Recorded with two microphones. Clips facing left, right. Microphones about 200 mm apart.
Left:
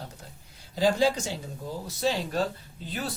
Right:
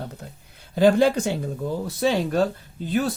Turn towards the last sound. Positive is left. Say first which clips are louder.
# right 11 dB
turn(degrees=-50)  # may be behind; listen again after turning